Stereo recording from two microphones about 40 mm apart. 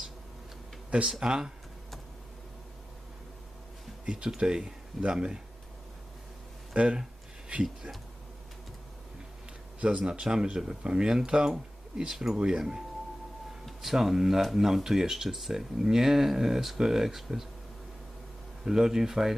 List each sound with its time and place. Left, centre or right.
0.9 s speech: right
1.2 s speech: centre
4.0 s speech: right
6.7 s speech: right
10.0 s speech: centre
13.7 s speech: centre
18.6 s speech: centre